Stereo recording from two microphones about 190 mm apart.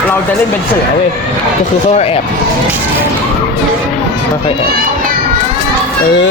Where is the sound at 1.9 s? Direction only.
30° left (ahead or behind).